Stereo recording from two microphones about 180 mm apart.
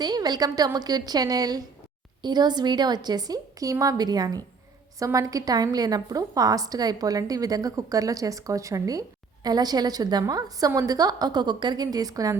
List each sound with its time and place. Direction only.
0.0 s a woman's voice: 20° right (ahead or behind)